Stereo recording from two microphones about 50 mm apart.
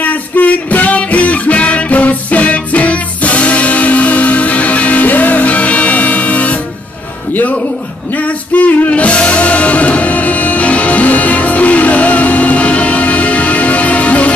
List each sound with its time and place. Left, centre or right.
0.0 s music: left
8.2 s music: left